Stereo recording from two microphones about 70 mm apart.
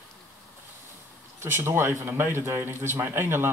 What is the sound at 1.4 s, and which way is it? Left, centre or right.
A man's voice, right.